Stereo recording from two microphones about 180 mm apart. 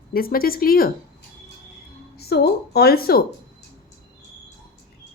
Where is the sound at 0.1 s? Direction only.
55° left (ahead or behind).